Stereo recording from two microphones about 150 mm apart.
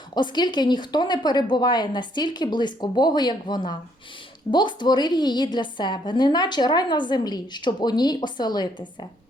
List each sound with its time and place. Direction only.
0.1 s a woman's voice: 30° left (ahead or behind)